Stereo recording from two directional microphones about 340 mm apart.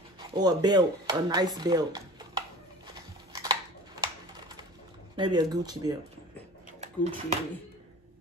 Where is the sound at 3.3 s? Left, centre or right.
Centre.